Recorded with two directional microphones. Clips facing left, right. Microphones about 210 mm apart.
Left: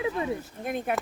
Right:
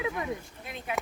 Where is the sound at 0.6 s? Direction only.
50° left (ahead or behind).